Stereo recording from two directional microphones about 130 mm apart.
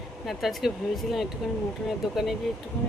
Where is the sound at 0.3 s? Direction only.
Centre (ahead or behind).